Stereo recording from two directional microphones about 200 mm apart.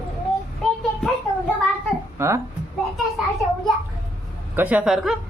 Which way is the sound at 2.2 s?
15° right (ahead or behind).